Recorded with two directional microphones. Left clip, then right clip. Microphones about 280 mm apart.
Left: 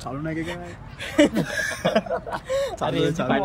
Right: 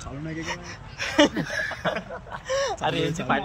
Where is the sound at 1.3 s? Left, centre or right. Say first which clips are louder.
Left 3 dB; left.